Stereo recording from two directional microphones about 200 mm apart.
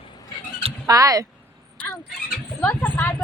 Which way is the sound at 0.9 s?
15° right (ahead or behind).